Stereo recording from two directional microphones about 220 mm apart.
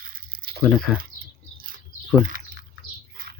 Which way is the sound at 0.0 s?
40° right (ahead or behind).